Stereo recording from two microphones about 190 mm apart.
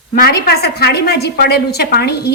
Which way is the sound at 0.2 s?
55° left (ahead or behind).